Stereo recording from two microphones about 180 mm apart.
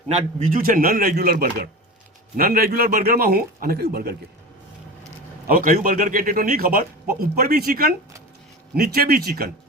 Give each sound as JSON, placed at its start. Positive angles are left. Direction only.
{"t": 0.4, "sound": "a man's voice", "side_deg": -50}
{"t": 5.5, "sound": "a man's voice", "side_deg": -50}